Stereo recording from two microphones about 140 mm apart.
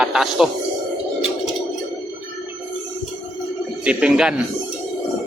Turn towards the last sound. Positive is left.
turn(degrees=-5)  # may be behind; listen again after turning